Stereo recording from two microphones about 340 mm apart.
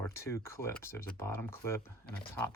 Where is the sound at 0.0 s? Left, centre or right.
Centre.